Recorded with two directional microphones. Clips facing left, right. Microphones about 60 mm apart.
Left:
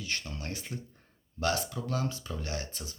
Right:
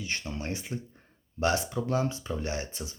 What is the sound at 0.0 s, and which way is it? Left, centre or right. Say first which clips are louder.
Speech: right 3 dB; right.